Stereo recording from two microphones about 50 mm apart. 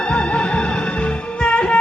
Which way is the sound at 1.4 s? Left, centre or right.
Left.